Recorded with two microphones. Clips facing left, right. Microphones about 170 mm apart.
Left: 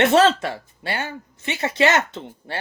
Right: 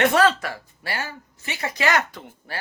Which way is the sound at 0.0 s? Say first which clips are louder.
Left 3 dB; 25° left (ahead or behind).